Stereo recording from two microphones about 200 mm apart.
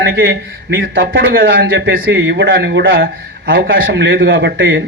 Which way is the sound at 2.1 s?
65° right (ahead or behind).